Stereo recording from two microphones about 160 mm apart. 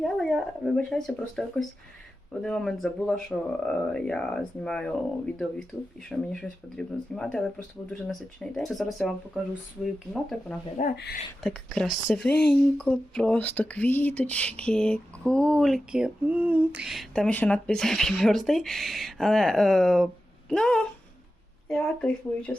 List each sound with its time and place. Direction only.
0.0 s speech: centre (ahead or behind)
10.8 s speech: 75° left (ahead or behind)
11.3 s speech: 5° left (ahead or behind)